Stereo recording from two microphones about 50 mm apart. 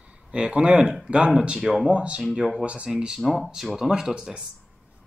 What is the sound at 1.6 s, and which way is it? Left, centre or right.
Speech, centre.